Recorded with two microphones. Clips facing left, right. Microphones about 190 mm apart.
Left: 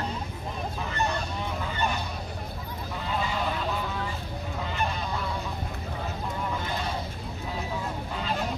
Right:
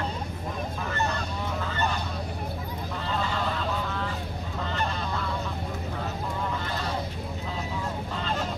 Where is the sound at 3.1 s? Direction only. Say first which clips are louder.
Even; 10° left (ahead or behind).